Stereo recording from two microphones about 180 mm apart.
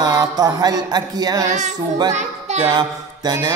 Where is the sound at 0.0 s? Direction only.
20° right (ahead or behind).